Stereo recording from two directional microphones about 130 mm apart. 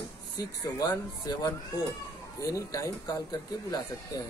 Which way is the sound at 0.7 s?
30° left (ahead or behind).